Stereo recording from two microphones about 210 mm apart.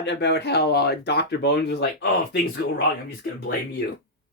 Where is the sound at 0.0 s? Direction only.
55° left (ahead or behind).